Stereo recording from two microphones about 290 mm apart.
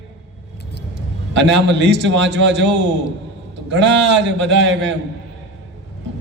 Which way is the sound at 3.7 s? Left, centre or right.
Right.